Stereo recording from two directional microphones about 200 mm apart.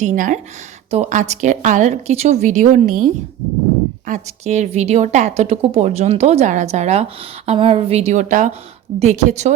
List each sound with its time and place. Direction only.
0.0 s a woman's voice: 40° right (ahead or behind)